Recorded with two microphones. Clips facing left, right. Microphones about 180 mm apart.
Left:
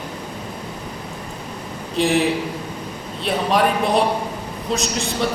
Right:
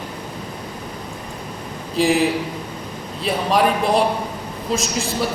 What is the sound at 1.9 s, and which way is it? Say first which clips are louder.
Speech: right 1 dB; centre (ahead or behind).